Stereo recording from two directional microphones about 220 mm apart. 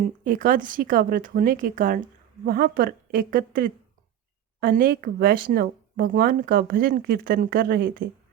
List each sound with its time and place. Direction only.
0.0 s speech: 40° right (ahead or behind)